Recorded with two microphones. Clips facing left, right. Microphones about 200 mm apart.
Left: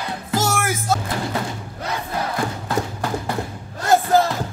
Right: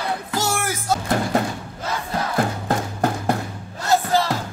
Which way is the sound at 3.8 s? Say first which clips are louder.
Left 3 dB; 50° left (ahead or behind).